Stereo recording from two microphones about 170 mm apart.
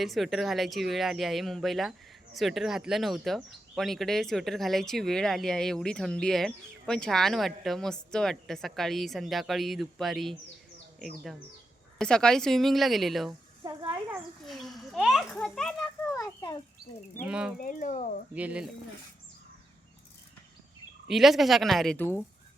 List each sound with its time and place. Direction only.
0.0 s speech: centre (ahead or behind)
11.9 s speech: 5° left (ahead or behind)
14.4 s a child's voice: centre (ahead or behind)
17.2 s speech: 5° right (ahead or behind)
17.6 s speech: 55° left (ahead or behind)
18.3 s speech: 5° right (ahead or behind)
21.1 s speech: centre (ahead or behind)
21.9 s speech: 10° left (ahead or behind)